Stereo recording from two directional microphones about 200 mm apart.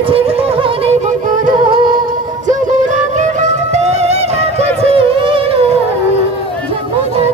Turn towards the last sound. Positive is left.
turn(degrees=-25)  # may be behind; listen again after turning